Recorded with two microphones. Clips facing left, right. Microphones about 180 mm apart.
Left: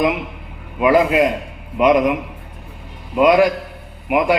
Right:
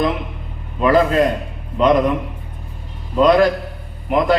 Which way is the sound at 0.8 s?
10° left (ahead or behind).